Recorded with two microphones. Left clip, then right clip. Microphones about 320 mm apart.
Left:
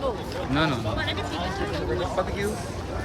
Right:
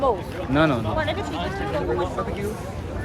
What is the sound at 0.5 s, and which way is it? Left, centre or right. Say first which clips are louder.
Speech: right 5 dB; centre.